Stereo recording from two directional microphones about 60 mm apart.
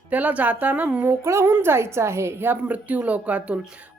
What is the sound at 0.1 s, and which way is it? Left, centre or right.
Speech, right.